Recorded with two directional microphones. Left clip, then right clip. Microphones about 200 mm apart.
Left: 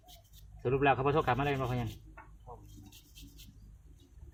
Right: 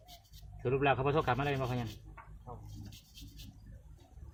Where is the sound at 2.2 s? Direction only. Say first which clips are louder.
Even; 10° right (ahead or behind).